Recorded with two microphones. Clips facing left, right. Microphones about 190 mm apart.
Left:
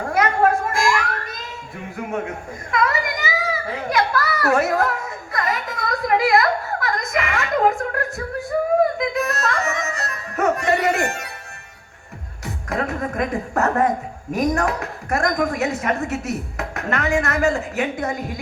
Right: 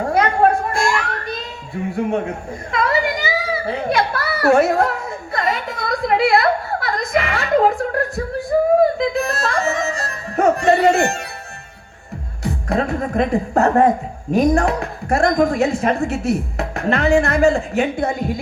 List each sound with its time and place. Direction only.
0.0 s a sound: 30° right (ahead or behind)
2.0 s speech: 30° right (ahead or behind)
2.7 s children playing: 30° right (ahead or behind)
12.4 s speech: 30° right (ahead or behind)